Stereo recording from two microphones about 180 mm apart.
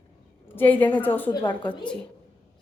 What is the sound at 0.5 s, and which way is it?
Speech, 10° left (ahead or behind).